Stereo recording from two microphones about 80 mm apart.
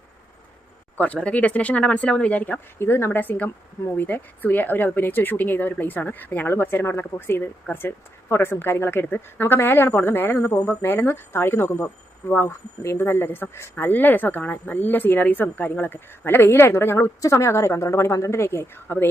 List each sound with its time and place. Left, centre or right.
0.9 s speech: centre
2.7 s speech: left